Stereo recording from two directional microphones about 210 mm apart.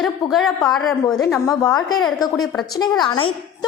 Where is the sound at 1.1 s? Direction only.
15° left (ahead or behind).